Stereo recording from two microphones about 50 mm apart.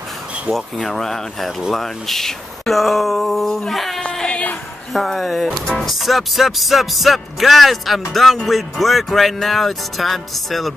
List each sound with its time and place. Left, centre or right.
0.5 s speech: centre
4.3 s a sound: left
4.9 s speech: centre